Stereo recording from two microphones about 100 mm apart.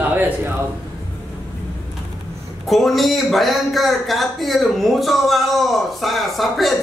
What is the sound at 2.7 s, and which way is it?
A man's voice, centre (ahead or behind).